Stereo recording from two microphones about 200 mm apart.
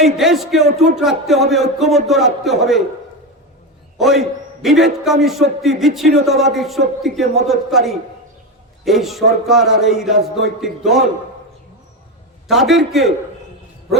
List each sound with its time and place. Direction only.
0.0 s speech: centre (ahead or behind)
3.9 s a man's voice: centre (ahead or behind)
12.5 s speech: centre (ahead or behind)